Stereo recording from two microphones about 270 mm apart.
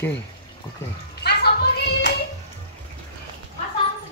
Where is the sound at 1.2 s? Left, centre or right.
Left.